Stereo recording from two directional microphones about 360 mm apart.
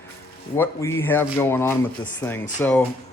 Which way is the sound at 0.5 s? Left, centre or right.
Centre.